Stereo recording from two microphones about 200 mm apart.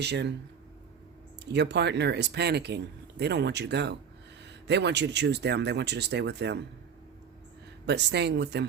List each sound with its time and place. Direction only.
0.0 s speech: 60° right (ahead or behind)
1.5 s speech: 60° right (ahead or behind)
7.9 s speech: 60° right (ahead or behind)